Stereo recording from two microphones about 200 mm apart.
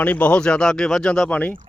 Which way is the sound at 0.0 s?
5° left (ahead or behind).